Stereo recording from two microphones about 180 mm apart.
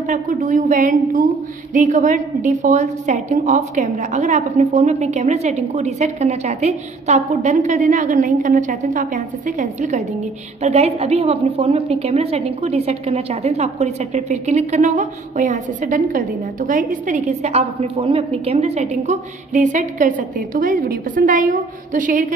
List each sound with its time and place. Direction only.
0.1 s a woman's voice: 45° right (ahead or behind)